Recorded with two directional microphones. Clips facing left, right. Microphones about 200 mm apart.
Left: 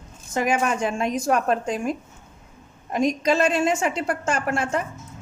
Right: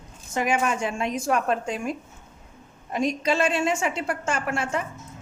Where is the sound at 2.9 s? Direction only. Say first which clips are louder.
Left 3 dB; 45° left (ahead or behind).